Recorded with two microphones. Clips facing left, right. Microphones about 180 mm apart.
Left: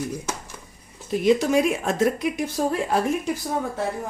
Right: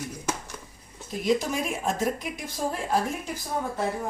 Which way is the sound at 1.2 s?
70° left (ahead or behind).